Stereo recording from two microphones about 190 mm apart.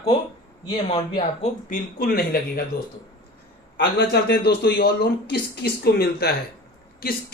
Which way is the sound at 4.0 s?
60° left (ahead or behind).